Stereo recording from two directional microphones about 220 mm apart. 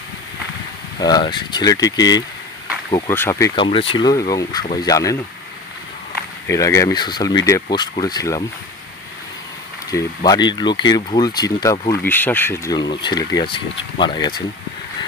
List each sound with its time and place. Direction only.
0.9 s speech: 20° left (ahead or behind)
6.5 s speech: 15° left (ahead or behind)
9.8 s speech: 15° left (ahead or behind)